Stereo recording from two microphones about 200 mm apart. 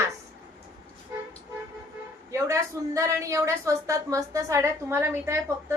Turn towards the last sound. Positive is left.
turn(degrees=-10)  # may be behind; listen again after turning